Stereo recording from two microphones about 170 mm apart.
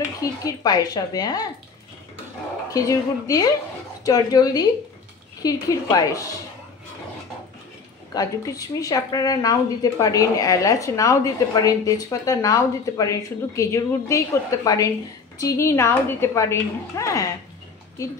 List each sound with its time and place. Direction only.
0.2 s speech: 20° left (ahead or behind)
2.7 s speech: 20° left (ahead or behind)
8.1 s a woman's voice: 20° left (ahead or behind)